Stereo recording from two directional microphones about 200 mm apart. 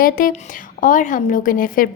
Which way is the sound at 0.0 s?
45° left (ahead or behind).